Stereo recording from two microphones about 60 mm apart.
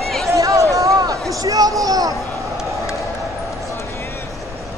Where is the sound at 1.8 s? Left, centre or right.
Right.